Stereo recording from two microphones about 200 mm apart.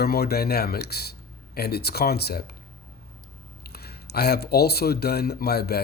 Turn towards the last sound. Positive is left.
turn(degrees=50)  # may be behind; listen again after turning